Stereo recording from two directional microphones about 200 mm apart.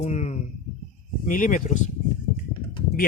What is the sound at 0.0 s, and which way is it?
Speech, 35° left (ahead or behind).